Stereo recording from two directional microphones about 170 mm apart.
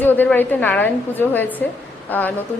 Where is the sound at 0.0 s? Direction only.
10° left (ahead or behind).